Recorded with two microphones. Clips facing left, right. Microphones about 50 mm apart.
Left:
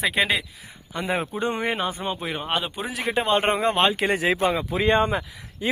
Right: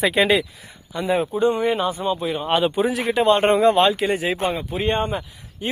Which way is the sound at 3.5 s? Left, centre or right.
Left.